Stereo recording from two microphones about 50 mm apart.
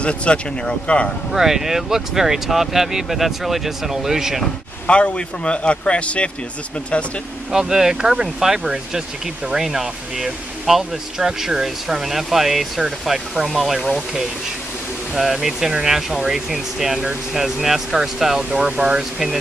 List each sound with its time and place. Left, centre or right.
0.0 s speech: left
1.3 s speech: centre
4.8 s speech: left
7.5 s speech: centre